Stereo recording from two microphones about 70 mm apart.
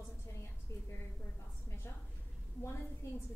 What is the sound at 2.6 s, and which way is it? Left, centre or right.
Speech, left.